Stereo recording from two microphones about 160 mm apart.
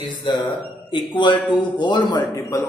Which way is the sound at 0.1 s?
30° left (ahead or behind).